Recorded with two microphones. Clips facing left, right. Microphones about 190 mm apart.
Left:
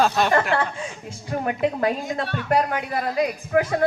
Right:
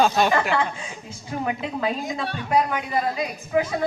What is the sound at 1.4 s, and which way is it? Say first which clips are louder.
Speech: left 5 dB; 55° left (ahead or behind).